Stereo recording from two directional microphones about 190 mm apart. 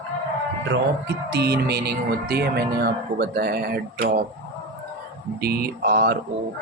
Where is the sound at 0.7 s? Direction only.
60° right (ahead or behind).